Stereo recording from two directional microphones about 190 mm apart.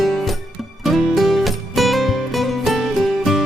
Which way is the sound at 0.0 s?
Centre (ahead or behind).